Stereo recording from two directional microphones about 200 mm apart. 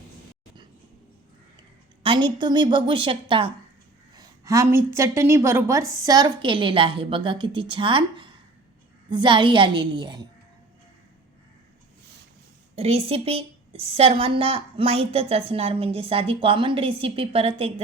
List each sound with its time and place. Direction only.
2.0 s a woman's voice: 25° right (ahead or behind)
12.7 s a woman's voice: 30° right (ahead or behind)